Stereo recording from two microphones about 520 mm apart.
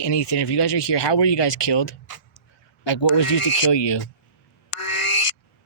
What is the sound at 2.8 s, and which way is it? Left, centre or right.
Speech, left.